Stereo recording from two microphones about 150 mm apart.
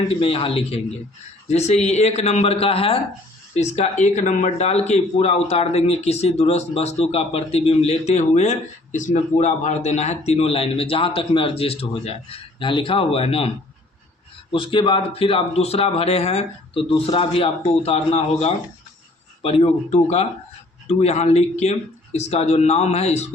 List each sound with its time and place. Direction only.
0.2 s speech: 40° left (ahead or behind)
14.5 s speech: 35° left (ahead or behind)